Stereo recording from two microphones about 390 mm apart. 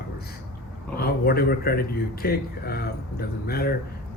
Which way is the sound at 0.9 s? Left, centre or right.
Left.